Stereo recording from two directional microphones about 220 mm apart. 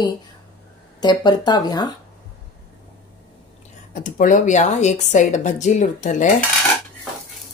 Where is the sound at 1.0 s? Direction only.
20° left (ahead or behind).